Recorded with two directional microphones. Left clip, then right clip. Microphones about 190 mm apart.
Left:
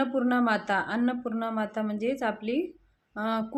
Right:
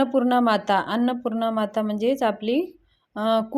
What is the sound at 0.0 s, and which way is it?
A woman's voice, 30° right (ahead or behind).